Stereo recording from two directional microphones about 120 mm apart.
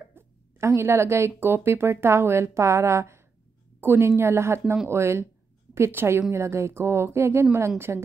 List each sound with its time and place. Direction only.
0.1 s plop: 20° right (ahead or behind)
1.4 s speech: 20° right (ahead or behind)